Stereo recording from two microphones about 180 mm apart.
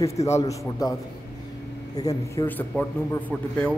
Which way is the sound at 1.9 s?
20° left (ahead or behind).